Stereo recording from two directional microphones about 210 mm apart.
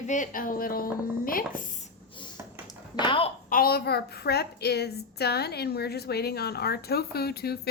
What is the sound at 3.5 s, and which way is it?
A woman's voice, 45° left (ahead or behind).